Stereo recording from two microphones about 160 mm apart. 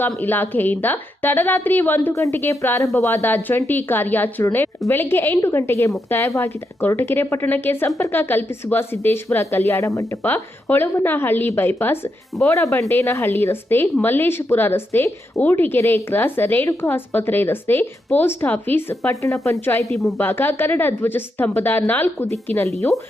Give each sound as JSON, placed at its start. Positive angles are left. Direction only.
{"t": 0.2, "sound": "speech", "side_deg": 10}